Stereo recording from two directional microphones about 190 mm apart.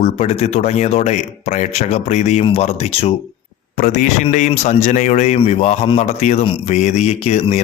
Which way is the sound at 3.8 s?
45° left (ahead or behind).